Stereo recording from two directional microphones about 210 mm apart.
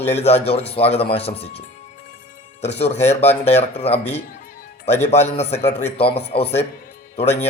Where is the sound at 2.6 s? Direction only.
30° left (ahead or behind).